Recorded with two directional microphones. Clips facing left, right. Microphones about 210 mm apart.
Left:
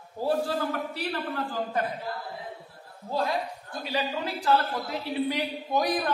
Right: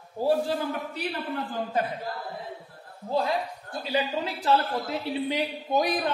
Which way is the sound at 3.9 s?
25° right (ahead or behind).